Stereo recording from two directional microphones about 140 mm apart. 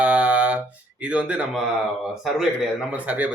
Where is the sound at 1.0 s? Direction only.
10° right (ahead or behind).